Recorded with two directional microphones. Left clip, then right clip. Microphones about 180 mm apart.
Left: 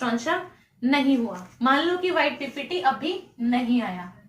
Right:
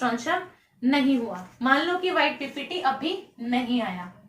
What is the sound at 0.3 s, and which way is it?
A woman's voice, 20° left (ahead or behind).